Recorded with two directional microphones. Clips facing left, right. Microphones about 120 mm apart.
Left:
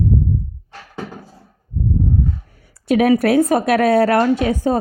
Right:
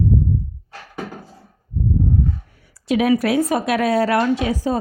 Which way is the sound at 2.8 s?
50° left (ahead or behind).